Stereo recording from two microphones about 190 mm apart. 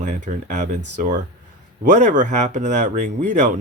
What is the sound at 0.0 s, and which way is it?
Speech, 40° right (ahead or behind).